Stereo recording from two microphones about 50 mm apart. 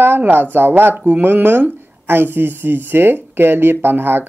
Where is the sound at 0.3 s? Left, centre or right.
Right.